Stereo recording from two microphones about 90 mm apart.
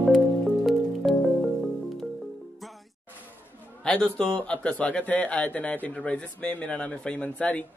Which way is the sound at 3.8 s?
10° left (ahead or behind).